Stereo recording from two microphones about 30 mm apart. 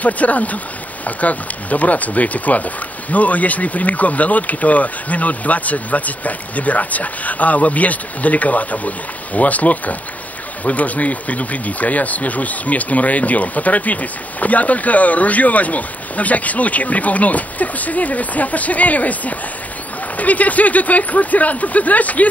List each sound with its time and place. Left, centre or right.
0.0 s speech: left